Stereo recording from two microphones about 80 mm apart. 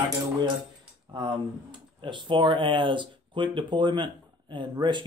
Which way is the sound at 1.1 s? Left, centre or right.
Right.